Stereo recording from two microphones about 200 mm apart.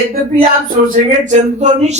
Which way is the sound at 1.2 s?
35° right (ahead or behind).